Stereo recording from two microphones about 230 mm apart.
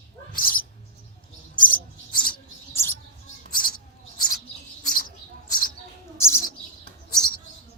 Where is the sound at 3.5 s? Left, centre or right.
Left.